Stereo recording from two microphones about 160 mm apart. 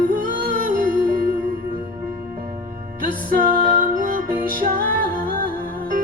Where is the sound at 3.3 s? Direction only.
60° right (ahead or behind).